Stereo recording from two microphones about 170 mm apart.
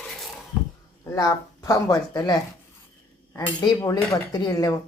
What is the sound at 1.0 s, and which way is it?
A man's voice, 20° left (ahead or behind).